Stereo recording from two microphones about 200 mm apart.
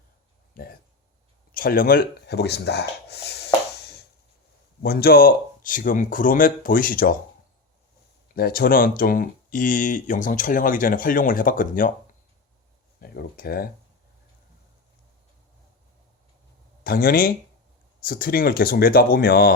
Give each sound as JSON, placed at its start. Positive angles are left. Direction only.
{"t": 0.5, "sound": "speech", "side_deg": 50}
{"t": 8.4, "sound": "speech", "side_deg": 50}
{"t": 13.0, "sound": "speech", "side_deg": 50}
{"t": 16.8, "sound": "speech", "side_deg": 50}